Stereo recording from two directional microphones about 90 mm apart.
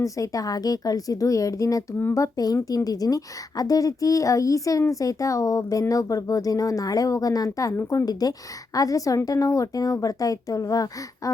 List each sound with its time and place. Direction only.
0.0 s speech: 40° left (ahead or behind)